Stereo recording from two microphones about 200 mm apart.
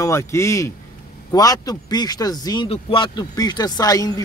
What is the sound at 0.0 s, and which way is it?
Speech, 15° left (ahead or behind).